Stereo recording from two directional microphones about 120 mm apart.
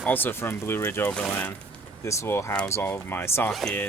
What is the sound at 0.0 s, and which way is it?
Speech, 15° left (ahead or behind).